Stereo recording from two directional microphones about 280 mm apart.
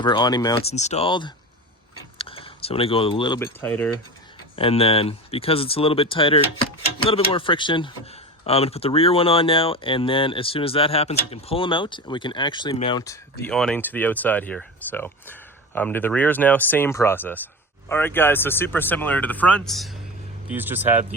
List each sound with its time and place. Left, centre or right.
0.0 s speech: centre
4.5 s speech: centre